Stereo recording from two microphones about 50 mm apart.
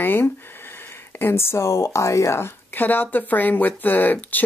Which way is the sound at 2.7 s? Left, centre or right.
Left.